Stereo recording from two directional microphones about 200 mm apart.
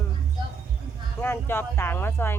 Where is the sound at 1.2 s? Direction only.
10° left (ahead or behind).